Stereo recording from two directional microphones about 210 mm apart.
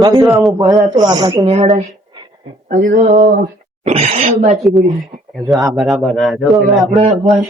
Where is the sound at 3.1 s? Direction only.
50° right (ahead or behind).